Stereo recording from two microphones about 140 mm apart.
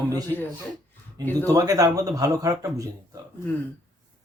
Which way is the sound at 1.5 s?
25° right (ahead or behind).